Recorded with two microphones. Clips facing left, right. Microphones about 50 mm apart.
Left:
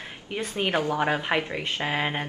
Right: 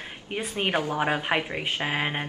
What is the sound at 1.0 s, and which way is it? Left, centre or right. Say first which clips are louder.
A woman's voice: even; centre.